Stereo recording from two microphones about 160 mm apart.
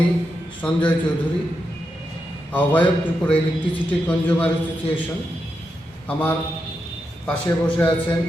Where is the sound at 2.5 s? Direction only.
10° left (ahead or behind).